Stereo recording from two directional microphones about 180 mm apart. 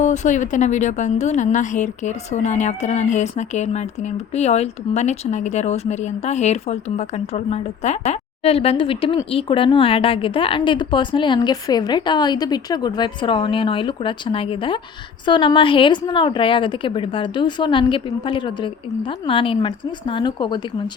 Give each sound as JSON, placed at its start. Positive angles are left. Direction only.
{"t": 0.0, "sound": "a woman's voice", "side_deg": 40}